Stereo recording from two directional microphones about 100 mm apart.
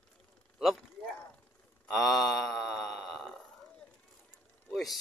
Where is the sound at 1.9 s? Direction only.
Centre (ahead or behind).